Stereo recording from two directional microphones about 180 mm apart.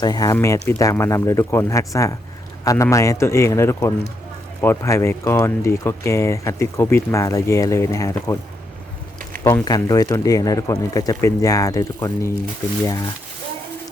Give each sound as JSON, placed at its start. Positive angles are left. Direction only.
{"t": 0.0, "sound": "speech", "side_deg": 20}
{"t": 9.4, "sound": "speech", "side_deg": 15}